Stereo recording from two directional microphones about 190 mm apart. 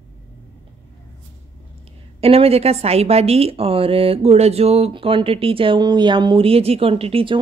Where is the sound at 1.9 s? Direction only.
30° right (ahead or behind).